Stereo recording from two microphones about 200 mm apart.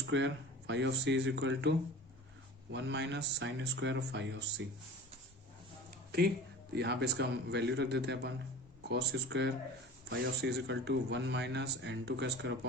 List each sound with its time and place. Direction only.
0.0 s speech: 65° right (ahead or behind)
2.7 s a man's voice: 60° right (ahead or behind)
6.1 s a man's voice: 50° right (ahead or behind)